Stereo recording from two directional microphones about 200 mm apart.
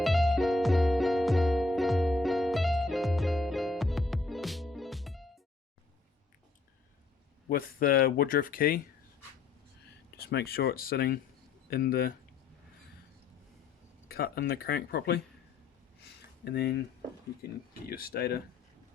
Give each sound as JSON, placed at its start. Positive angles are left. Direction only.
{"t": 0.0, "sound": "music", "side_deg": 0}
{"t": 7.5, "sound": "speech", "side_deg": 45}
{"t": 10.2, "sound": "speech", "side_deg": 50}
{"t": 14.1, "sound": "speech", "side_deg": 50}
{"t": 16.4, "sound": "speech", "side_deg": 55}